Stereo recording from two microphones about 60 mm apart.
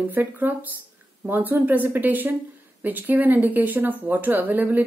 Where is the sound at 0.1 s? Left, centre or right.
Right.